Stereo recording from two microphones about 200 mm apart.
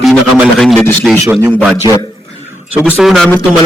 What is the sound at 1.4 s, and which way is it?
Speech, 10° right (ahead or behind).